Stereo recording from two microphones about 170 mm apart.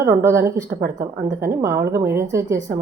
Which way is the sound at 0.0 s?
15° right (ahead or behind).